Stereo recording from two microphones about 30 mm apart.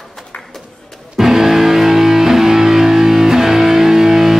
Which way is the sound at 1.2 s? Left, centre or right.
Centre.